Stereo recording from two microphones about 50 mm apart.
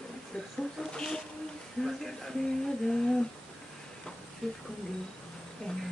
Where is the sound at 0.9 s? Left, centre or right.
Centre.